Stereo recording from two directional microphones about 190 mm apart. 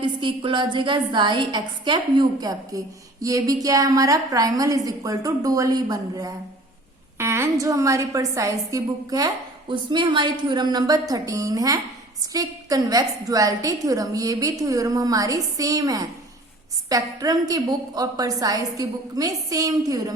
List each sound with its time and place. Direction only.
0.0 s a woman's voice: 25° right (ahead or behind)
7.2 s a sound: 15° right (ahead or behind)
7.6 s a woman's voice: 15° right (ahead or behind)